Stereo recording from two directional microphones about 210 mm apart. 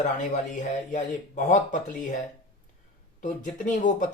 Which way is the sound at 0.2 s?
35° left (ahead or behind).